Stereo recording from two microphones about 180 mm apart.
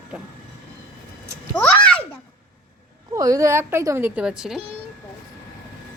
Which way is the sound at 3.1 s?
20° right (ahead or behind).